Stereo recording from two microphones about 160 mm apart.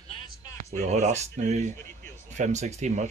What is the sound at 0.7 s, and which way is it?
Speech, 45° right (ahead or behind).